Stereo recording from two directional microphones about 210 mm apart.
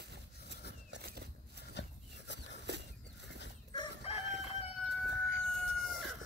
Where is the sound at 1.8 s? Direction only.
55° left (ahead or behind).